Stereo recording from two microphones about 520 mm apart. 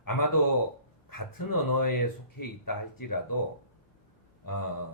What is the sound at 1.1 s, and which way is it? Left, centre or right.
Speech, left.